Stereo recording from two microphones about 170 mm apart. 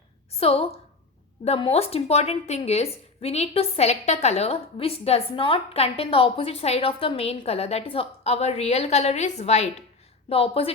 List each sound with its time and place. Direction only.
0.3 s a woman's voice: 35° left (ahead or behind)